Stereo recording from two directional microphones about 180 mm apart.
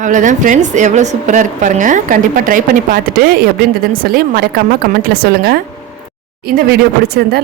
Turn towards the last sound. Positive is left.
turn(degrees=-60)  # may be behind; listen again after turning